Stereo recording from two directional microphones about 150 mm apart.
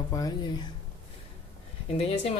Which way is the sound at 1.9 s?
40° left (ahead or behind).